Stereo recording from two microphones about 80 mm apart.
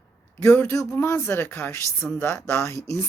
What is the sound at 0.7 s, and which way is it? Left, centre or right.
Speech, left.